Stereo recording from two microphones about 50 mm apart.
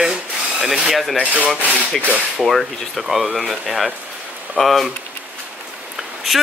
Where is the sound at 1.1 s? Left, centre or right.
Right.